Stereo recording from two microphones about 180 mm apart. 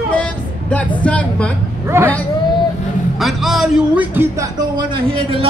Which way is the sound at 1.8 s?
15° right (ahead or behind).